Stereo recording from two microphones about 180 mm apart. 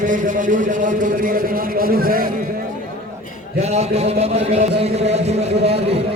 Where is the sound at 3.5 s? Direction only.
35° right (ahead or behind).